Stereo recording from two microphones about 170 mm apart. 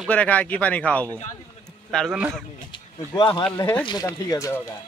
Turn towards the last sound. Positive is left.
turn(degrees=20)  # may be behind; listen again after turning